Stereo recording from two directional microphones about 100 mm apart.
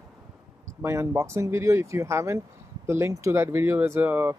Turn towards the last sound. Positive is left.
turn(degrees=-20)  # may be behind; listen again after turning